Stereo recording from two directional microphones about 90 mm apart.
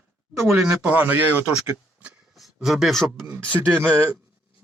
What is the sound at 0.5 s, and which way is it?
Speech, 5° right (ahead or behind).